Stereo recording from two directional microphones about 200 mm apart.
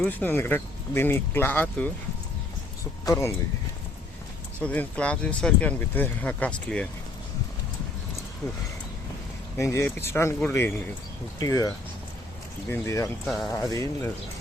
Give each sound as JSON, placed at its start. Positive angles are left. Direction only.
{"t": 0.0, "sound": "speech", "side_deg": 10}
{"t": 3.1, "sound": "speech", "side_deg": 15}
{"t": 4.6, "sound": "speech", "side_deg": 5}
{"t": 9.6, "sound": "speech", "side_deg": 15}
{"t": 13.2, "sound": "speech", "side_deg": 0}
{"t": 13.5, "sound": "speech", "side_deg": 15}